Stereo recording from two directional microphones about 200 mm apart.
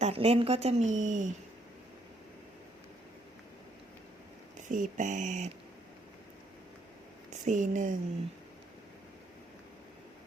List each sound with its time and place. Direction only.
0.0 s a woman's voice: 30° right (ahead or behind)
4.7 s a woman's voice: 40° right (ahead or behind)
7.3 s speech: 40° right (ahead or behind)